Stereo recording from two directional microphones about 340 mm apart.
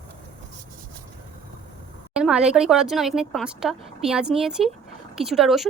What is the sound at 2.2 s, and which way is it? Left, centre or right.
A woman's voice, centre.